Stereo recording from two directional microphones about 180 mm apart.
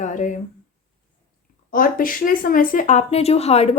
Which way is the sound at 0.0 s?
45° left (ahead or behind).